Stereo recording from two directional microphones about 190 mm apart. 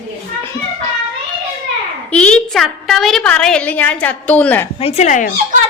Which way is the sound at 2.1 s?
5° left (ahead or behind).